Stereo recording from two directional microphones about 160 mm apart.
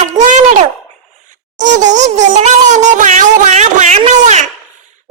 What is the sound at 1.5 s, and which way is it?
Speech, 50° right (ahead or behind).